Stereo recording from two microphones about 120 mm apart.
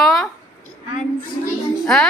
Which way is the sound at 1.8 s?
5° left (ahead or behind).